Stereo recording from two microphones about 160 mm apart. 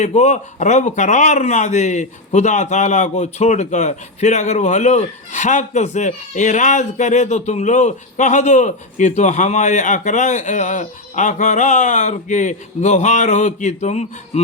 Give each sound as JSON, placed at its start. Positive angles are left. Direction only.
{"t": 0.0, "sound": "speech", "side_deg": 45}